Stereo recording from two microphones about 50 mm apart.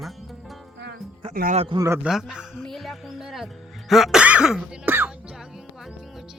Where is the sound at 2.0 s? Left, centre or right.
Centre.